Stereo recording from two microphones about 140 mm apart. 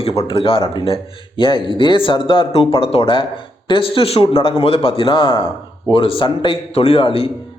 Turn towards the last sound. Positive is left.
turn(degrees=40)  # may be behind; listen again after turning